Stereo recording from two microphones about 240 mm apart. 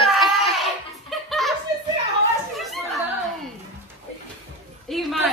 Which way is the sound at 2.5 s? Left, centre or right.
Centre.